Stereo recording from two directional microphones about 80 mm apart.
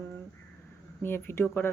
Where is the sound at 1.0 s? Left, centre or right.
Left.